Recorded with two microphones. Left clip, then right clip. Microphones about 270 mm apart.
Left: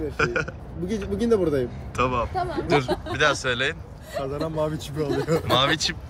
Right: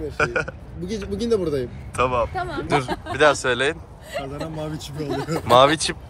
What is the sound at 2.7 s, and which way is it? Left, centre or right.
Speech, centre.